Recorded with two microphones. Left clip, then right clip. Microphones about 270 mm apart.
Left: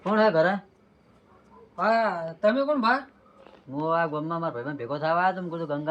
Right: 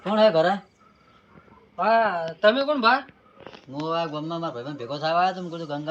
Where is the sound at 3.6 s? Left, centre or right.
Centre.